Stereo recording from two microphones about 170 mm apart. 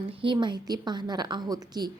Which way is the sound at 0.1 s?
30° right (ahead or behind).